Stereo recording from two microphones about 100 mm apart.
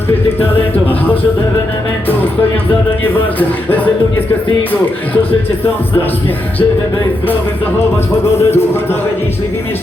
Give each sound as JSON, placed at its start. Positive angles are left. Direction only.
{"t": 3.0, "sound": "speech", "side_deg": 20}
{"t": 8.4, "sound": "speech", "side_deg": 25}